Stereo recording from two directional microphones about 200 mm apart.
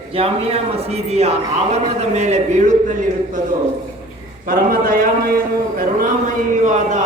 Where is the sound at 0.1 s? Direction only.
30° right (ahead or behind).